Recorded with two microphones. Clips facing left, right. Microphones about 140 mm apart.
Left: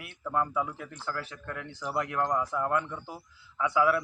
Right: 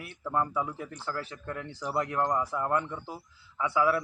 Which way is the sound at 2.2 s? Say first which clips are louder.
Even; 5° right (ahead or behind).